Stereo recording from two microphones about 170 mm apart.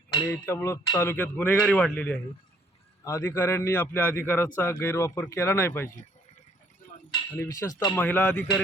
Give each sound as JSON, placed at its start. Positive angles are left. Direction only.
{"t": 0.3, "sound": "a man's voice", "side_deg": 15}
{"t": 7.3, "sound": "speech", "side_deg": 15}
{"t": 7.9, "sound": "a man's voice", "side_deg": 10}